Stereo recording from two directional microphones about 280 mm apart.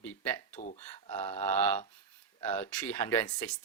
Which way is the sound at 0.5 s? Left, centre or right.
Left.